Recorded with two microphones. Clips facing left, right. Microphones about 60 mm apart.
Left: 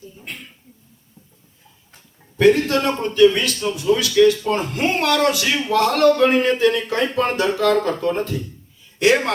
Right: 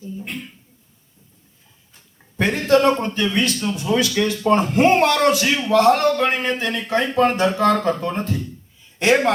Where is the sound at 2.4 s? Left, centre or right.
Right.